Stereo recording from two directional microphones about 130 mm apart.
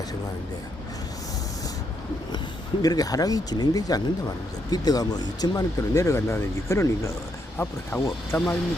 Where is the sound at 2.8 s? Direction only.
30° left (ahead or behind).